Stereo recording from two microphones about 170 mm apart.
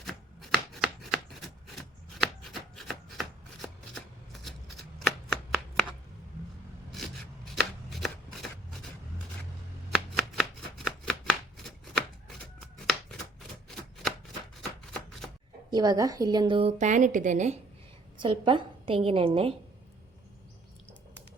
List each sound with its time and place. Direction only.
0.0 s chopping: centre (ahead or behind)
2.1 s shuffling cards: centre (ahead or behind)
7.4 s shuffling cards: centre (ahead or behind)
9.9 s shuffling cards: centre (ahead or behind)
15.7 s a woman's voice: 20° right (ahead or behind); by 17.6 s 45° right (ahead or behind)
18.2 s a woman's voice: 30° right (ahead or behind)